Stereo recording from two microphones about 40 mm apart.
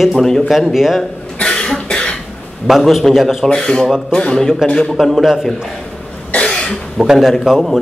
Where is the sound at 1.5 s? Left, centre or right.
Centre.